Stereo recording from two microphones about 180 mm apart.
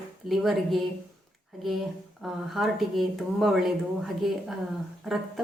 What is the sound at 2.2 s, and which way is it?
A woman's voice, centre (ahead or behind).